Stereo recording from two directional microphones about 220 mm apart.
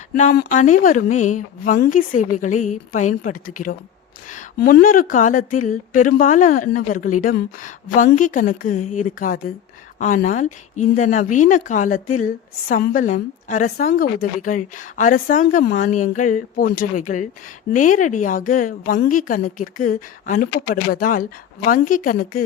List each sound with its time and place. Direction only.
0.2 s a woman's voice: 35° left (ahead or behind)